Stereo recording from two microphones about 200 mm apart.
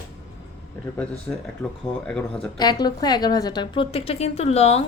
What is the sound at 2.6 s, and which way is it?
A woman's voice, 20° left (ahead or behind).